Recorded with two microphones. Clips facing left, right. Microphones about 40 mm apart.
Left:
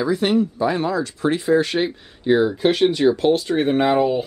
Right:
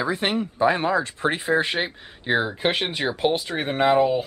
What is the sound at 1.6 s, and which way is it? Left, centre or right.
Speech, centre.